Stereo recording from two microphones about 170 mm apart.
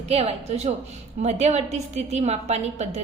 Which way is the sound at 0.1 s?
35° right (ahead or behind).